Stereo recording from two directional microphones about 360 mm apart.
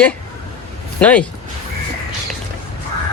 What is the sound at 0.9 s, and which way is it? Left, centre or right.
Speech, centre.